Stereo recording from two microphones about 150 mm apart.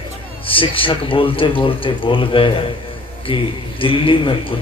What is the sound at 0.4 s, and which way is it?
A man's voice, 35° left (ahead or behind).